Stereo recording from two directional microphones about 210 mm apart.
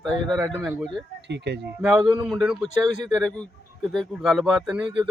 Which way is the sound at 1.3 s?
55° right (ahead or behind).